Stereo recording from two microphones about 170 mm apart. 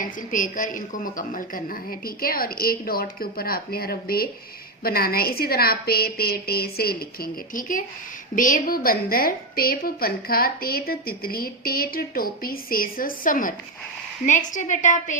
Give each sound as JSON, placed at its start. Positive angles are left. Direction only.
{"t": 0.0, "sound": "a woman's voice", "side_deg": 50}